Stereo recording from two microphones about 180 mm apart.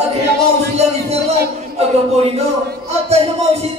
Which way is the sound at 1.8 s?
35° right (ahead or behind).